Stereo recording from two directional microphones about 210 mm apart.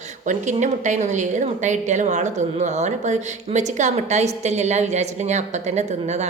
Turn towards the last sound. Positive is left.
turn(degrees=-35)  # may be behind; listen again after turning